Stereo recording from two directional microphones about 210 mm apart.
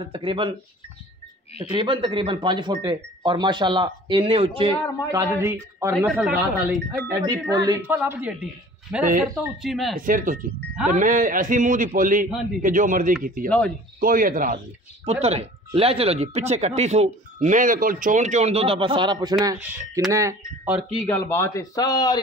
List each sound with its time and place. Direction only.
0.1 s speech: 25° right (ahead or behind)
1.7 s speech: 25° right (ahead or behind)
5.1 s a woman's voice: 10° right (ahead or behind)
6.0 s speech: centre (ahead or behind)
7.1 s a woman's voice: 15° right (ahead or behind); by 9.9 s centre (ahead or behind)
9.9 s speech: 40° right (ahead or behind)
15.0 s a woman's voice: 30° right (ahead or behind); by 20.8 s 10° right (ahead or behind)
21.1 s a man's voice: 10° left (ahead or behind)